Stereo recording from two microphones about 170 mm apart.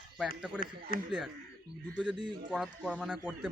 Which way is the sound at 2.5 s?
Centre (ahead or behind).